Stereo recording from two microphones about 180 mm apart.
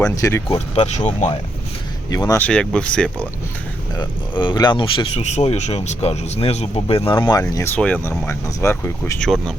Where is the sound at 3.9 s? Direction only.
25° left (ahead or behind).